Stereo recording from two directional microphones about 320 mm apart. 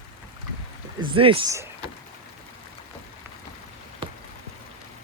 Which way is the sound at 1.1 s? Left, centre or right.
Centre.